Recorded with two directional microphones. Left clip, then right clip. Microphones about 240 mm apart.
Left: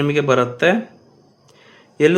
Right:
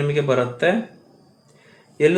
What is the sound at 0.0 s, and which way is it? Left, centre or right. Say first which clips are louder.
Speech: left 3 dB; left.